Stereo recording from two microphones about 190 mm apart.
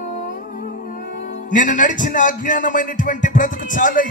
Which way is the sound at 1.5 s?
45° left (ahead or behind).